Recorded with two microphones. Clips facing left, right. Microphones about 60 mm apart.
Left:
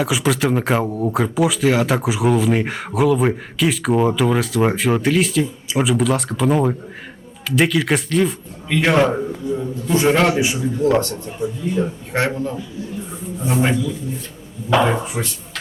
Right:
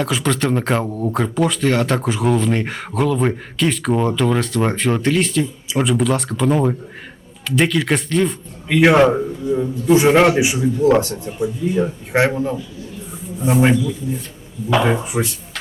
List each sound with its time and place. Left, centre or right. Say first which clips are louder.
0.0 s speech: left 1 dB; centre
8.7 s a man's voice: right 4 dB; centre